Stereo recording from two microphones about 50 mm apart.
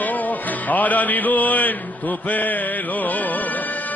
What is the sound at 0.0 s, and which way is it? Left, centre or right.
Music, left.